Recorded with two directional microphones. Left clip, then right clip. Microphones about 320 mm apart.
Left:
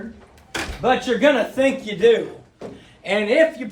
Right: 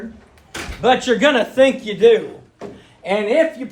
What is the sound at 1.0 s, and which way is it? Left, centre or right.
A man's voice, right.